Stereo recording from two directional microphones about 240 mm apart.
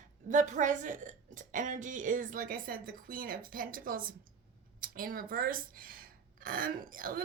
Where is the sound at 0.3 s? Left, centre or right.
Right.